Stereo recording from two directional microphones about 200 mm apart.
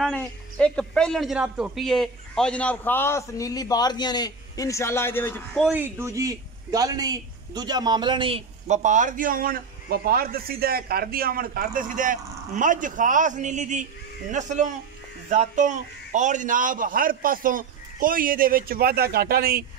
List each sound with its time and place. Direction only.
0.0 s a man's voice: 5° left (ahead or behind)
5.6 s a man's voice: 10° right (ahead or behind); by 19.6 s 50° right (ahead or behind)